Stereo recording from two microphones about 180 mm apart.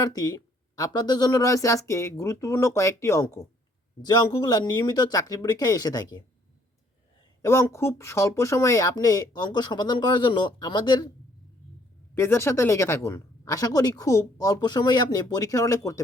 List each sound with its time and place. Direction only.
0.0 s speech: 20° left (ahead or behind)
7.4 s speech: 15° left (ahead or behind)
12.1 s speech: 15° left (ahead or behind)